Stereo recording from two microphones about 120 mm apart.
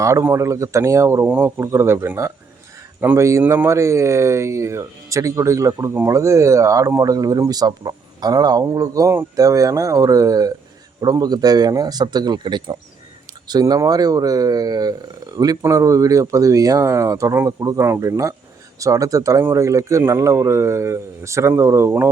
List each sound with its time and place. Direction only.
0.0 s speech: 25° right (ahead or behind)